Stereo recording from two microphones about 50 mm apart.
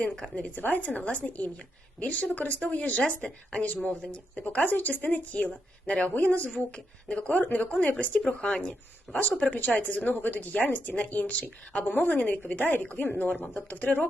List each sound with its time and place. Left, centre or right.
0.3 s a woman's voice: left
4.6 s a woman's voice: left
8.4 s a woman's voice: left